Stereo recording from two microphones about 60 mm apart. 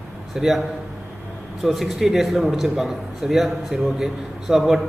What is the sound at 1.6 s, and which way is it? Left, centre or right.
A man's voice, centre.